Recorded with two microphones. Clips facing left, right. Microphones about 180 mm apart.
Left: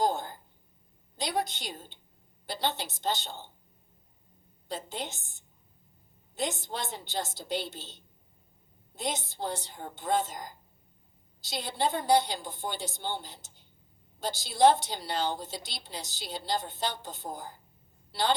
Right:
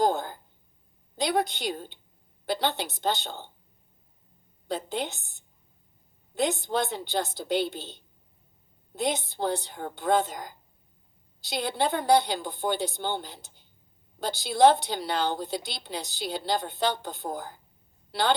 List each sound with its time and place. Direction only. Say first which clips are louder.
0.0 s a sound: right 4 dB; 60° right (ahead or behind)
1.1 s a woman's voice: right 5 dB; 60° right (ahead or behind)
4.7 s a woman's voice: right 6 dB; 60° right (ahead or behind)
9.0 s a woman's voice: right 6 dB; 60° right (ahead or behind)